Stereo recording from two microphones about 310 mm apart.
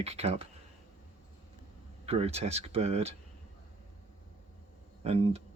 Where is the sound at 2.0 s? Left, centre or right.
Centre.